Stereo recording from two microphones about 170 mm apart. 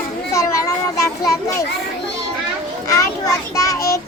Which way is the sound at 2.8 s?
20° left (ahead or behind).